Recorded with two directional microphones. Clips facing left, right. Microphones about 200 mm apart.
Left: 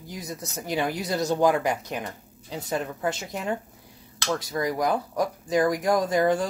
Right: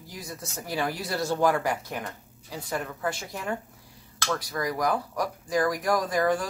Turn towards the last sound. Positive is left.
turn(degrees=25)  # may be behind; listen again after turning